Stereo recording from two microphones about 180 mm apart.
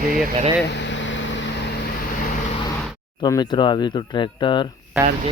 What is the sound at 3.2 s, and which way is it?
Speech, 30° left (ahead or behind).